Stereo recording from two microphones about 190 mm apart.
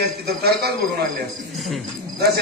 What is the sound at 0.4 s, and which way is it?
Speech, 55° right (ahead or behind).